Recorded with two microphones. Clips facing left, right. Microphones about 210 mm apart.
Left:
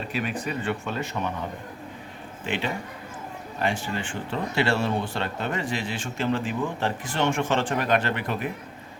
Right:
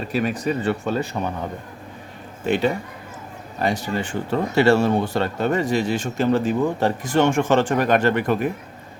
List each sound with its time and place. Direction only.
0.1 s speech: 40° right (ahead or behind)
2.4 s speech: 40° right (ahead or behind)